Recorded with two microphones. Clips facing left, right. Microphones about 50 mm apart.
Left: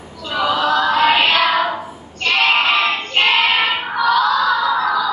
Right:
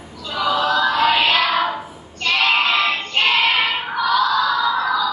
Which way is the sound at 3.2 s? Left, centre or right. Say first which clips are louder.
Left 3 dB; left.